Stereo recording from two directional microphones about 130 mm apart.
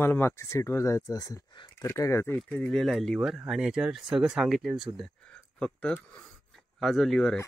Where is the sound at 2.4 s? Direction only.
5° left (ahead or behind).